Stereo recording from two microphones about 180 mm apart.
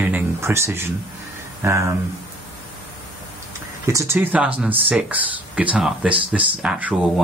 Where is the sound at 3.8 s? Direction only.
15° right (ahead or behind).